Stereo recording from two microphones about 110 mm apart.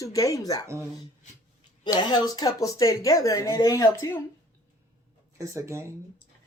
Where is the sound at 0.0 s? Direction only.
30° left (ahead or behind).